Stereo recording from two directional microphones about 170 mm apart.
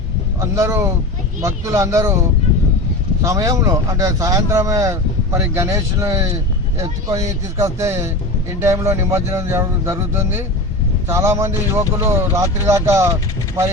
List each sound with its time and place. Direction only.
0.3 s speech: 20° right (ahead or behind)
3.2 s speech: 20° right (ahead or behind)